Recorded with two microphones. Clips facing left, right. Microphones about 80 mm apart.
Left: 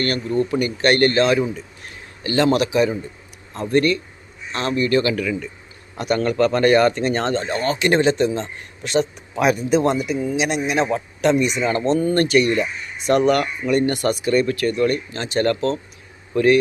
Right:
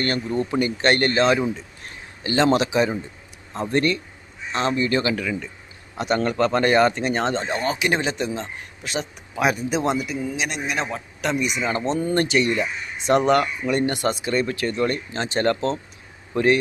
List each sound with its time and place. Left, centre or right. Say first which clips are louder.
0.3 s speech: left 4 dB; right
10.0 s speech: left 5 dB; centre
10.9 s a man's voice: left 7 dB; centre; by 16.6 s right